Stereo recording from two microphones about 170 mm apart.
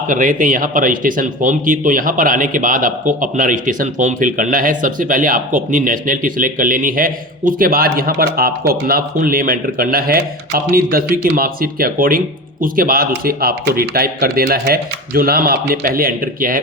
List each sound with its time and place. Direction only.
0.1 s speech: 50° right (ahead or behind)